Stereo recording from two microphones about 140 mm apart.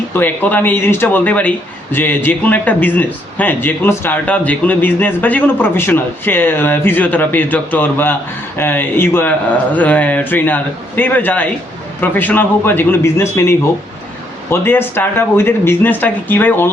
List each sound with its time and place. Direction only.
0.1 s a man's voice: 15° left (ahead or behind)